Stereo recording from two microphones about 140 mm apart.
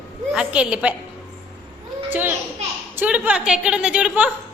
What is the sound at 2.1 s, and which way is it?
A child's voice, 15° right (ahead or behind).